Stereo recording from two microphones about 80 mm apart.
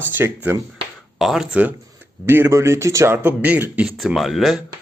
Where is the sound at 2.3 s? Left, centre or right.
Right.